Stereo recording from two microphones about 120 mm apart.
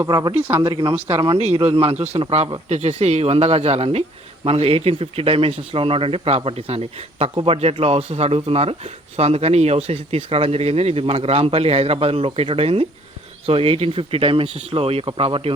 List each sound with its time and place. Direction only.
0.1 s speech: 30° right (ahead or behind)
0.4 s speech: 15° right (ahead or behind)
0.7 s a man's voice: 40° right (ahead or behind)
1.2 s a man's voice: 55° right (ahead or behind)
2.6 s a man's voice: 65° right (ahead or behind); by 15.5 s 50° right (ahead or behind)